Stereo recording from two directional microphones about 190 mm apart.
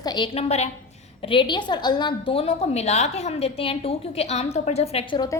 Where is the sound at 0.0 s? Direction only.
25° left (ahead or behind).